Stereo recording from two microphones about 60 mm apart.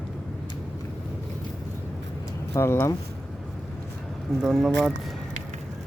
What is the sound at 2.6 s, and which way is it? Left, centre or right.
Speech, left.